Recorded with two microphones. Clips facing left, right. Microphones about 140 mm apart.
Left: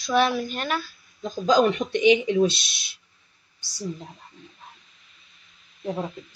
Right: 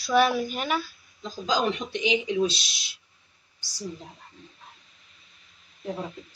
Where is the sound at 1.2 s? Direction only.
55° left (ahead or behind).